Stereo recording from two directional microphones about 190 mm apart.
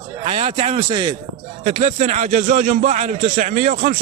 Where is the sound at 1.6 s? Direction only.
35° right (ahead or behind).